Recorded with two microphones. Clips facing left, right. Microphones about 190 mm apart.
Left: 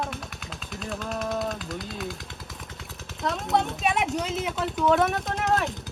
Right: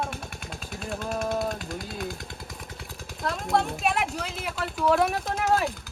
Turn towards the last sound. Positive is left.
turn(degrees=0)  # may be behind; listen again after turning